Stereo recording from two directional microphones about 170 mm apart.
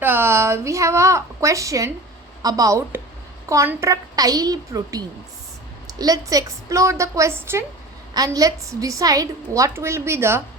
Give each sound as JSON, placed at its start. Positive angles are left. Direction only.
{"t": 0.0, "sound": "a woman's voice", "side_deg": -15}